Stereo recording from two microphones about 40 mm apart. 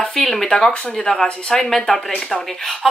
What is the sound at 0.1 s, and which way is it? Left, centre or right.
Speech, centre.